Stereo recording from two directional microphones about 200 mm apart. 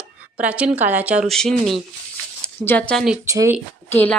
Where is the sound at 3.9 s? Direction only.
10° left (ahead or behind).